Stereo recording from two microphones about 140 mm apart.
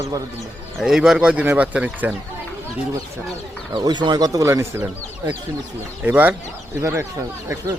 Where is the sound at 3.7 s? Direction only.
30° right (ahead or behind).